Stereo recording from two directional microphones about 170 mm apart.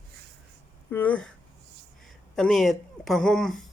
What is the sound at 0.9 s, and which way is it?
Speech, 10° left (ahead or behind).